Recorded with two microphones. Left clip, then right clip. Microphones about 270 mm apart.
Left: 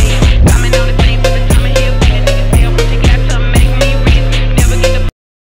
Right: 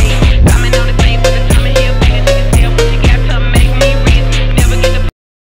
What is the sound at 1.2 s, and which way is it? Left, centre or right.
Music, centre.